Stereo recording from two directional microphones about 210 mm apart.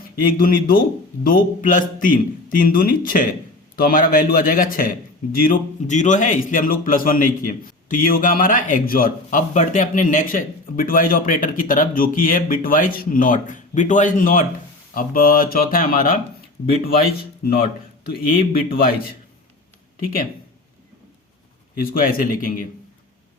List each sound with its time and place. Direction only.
0.2 s a man's voice: 45° left (ahead or behind)
18.0 s speech: 45° left (ahead or behind)
21.8 s a man's voice: 40° left (ahead or behind)